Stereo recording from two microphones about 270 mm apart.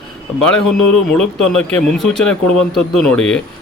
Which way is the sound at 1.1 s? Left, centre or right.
Centre.